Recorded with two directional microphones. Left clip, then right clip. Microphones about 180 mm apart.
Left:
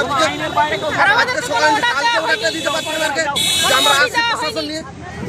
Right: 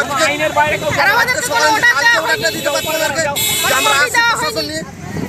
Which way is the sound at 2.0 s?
5° right (ahead or behind).